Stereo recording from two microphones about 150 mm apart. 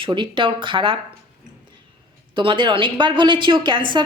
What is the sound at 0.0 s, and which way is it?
Speech, 35° right (ahead or behind).